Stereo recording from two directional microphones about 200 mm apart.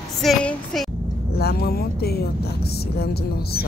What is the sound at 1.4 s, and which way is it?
Speech, 50° left (ahead or behind).